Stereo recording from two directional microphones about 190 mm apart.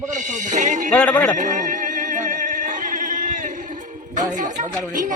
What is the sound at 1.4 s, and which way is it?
Music, 40° right (ahead or behind).